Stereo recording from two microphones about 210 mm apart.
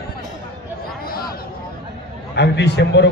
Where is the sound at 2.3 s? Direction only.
55° left (ahead or behind).